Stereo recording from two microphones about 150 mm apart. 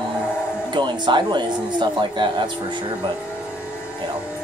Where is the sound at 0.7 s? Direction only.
30° right (ahead or behind).